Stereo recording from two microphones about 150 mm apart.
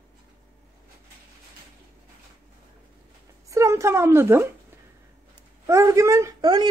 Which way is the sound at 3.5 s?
20° right (ahead or behind).